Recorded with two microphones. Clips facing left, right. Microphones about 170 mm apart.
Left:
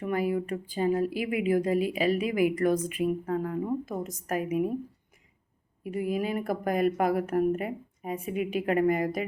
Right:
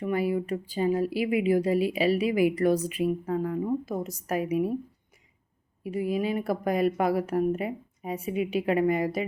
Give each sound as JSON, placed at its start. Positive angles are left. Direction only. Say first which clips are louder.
{"t": 0.1, "sound": "speech", "louder": "right 1 dB", "side_deg": 45}
{"t": 6.0, "sound": "speech", "louder": "right 2 dB", "side_deg": 45}